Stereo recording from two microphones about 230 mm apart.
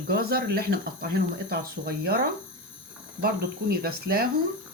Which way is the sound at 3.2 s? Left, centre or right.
Right.